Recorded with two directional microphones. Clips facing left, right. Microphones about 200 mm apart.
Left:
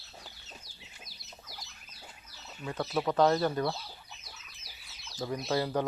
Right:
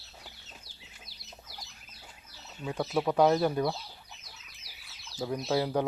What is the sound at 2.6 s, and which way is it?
Speech, 10° right (ahead or behind).